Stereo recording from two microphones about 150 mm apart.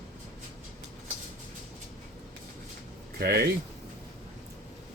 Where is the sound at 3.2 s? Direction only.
90° right.